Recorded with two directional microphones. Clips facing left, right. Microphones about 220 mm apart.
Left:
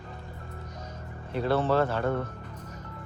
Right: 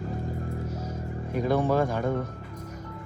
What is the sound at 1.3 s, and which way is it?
Speech, 10° right (ahead or behind).